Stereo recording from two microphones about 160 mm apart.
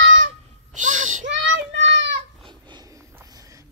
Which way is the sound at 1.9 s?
90° right.